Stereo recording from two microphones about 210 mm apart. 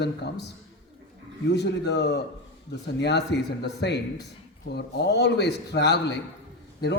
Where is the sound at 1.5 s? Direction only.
55° left (ahead or behind).